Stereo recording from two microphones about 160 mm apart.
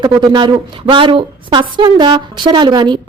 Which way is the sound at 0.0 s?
30° right (ahead or behind).